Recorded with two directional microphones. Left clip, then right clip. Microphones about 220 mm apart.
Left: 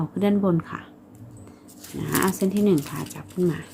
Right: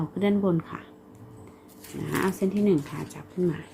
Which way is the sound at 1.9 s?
5° left (ahead or behind).